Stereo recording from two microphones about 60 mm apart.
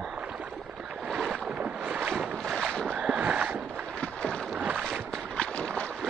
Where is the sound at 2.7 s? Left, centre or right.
Centre.